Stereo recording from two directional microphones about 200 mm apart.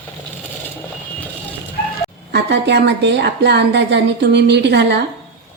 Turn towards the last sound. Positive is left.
turn(degrees=-60)  # may be behind; listen again after turning